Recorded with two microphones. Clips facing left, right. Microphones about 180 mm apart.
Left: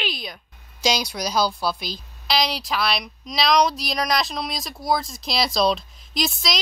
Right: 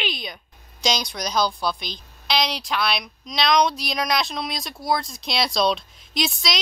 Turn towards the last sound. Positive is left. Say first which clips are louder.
# even
turn(degrees=0)  # may be behind; listen again after turning